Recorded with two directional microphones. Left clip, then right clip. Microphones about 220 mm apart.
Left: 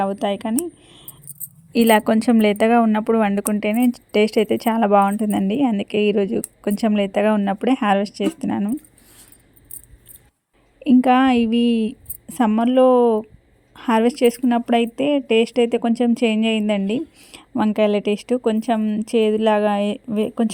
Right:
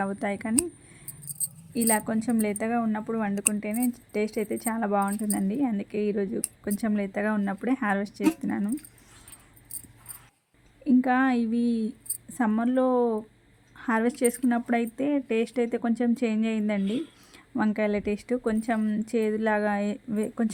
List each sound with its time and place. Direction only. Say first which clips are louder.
0.0 s a woman's voice: left 9 dB; 20° left (ahead or behind)
1.7 s a woman's voice: left 12 dB; 45° left (ahead or behind); by 8.7 s 25° left (ahead or behind)
10.8 s a woman's voice: left 8 dB; 35° left (ahead or behind)